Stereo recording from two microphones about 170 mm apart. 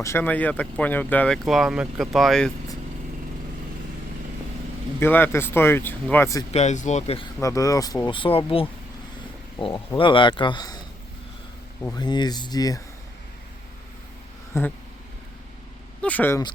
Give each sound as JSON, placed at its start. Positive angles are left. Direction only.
{"t": 0.0, "sound": "speech", "side_deg": 15}
{"t": 4.9, "sound": "speech", "side_deg": 10}
{"t": 6.5, "sound": "speech", "side_deg": 40}
{"t": 7.4, "sound": "speech", "side_deg": 20}
{"t": 11.9, "sound": "speech", "side_deg": 25}
{"t": 14.5, "sound": "speech", "side_deg": 15}
{"t": 16.0, "sound": "speech", "side_deg": 10}